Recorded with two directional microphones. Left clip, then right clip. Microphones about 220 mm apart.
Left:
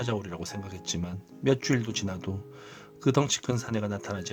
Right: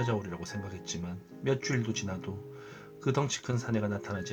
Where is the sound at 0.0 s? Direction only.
50° left (ahead or behind).